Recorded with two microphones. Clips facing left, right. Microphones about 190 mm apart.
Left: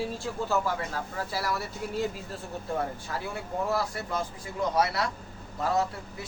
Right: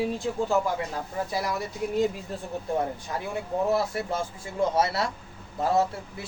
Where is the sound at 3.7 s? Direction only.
25° right (ahead or behind).